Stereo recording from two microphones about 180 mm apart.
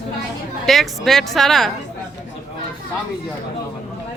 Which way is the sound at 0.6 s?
Centre (ahead or behind).